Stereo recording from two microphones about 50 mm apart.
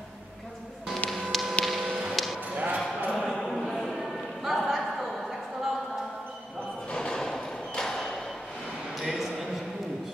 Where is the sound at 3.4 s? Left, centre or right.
Centre.